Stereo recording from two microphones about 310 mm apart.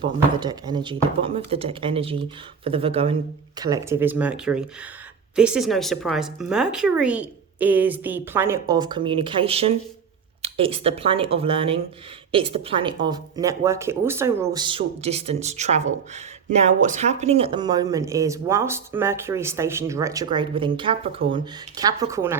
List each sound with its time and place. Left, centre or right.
0.0 s a woman's voice: centre